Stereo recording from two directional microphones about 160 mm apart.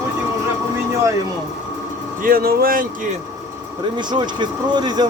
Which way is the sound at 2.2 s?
65° right (ahead or behind).